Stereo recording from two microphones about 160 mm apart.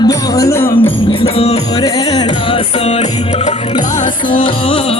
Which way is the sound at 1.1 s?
35° left (ahead or behind).